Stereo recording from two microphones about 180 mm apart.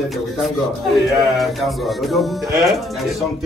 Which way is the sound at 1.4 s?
Centre (ahead or behind).